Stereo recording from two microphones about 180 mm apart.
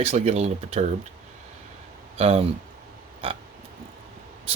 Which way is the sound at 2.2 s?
35° right (ahead or behind).